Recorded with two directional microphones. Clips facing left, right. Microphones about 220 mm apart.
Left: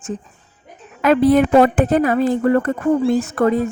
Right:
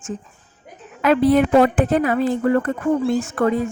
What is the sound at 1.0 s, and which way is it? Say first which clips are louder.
A woman's voice: left 2 dB; 45° left (ahead or behind).